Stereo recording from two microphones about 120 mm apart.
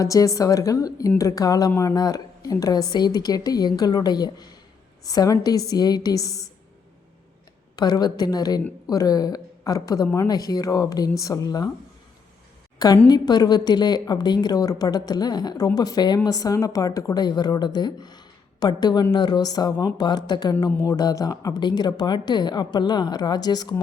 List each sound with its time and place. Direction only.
0.0 s a woman's voice: 30° left (ahead or behind)
7.8 s a woman's voice: 35° left (ahead or behind)
13.1 s a woman's voice: 35° left (ahead or behind)